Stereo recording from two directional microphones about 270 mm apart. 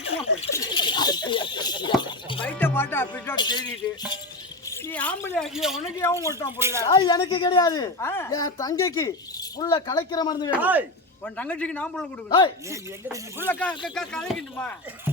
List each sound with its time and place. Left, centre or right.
0.0 s a sound: left
2.5 s a woman's voice: centre
6.8 s a woman's voice: centre
10.6 s speech: centre
11.3 s a woman's voice: centre
12.7 s speech: centre
13.5 s a woman's voice: centre